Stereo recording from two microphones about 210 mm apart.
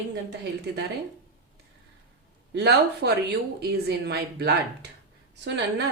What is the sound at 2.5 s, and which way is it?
Speech, 50° right (ahead or behind).